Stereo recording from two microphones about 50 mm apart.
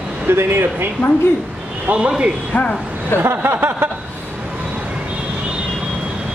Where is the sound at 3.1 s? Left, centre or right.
Right.